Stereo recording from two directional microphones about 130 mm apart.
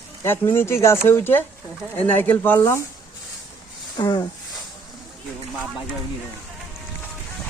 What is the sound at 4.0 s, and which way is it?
Speech, 30° left (ahead or behind).